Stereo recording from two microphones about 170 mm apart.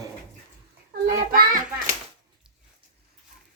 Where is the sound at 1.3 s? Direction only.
55° right (ahead or behind).